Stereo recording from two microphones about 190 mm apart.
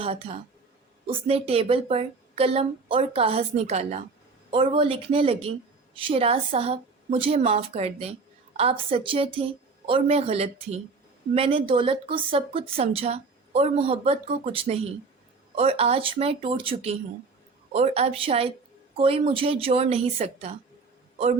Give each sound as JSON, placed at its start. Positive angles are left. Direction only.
{"t": 0.0, "sound": "speech", "side_deg": -30}